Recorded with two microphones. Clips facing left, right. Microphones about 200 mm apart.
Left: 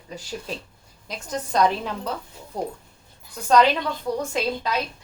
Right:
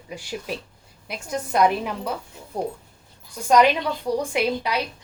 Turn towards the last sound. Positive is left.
turn(degrees=-15)  # may be behind; listen again after turning